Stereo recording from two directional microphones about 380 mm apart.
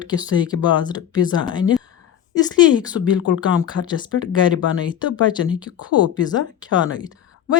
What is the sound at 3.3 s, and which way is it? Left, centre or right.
Speech, centre.